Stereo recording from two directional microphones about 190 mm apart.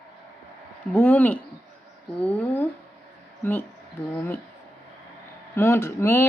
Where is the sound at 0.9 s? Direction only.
10° left (ahead or behind).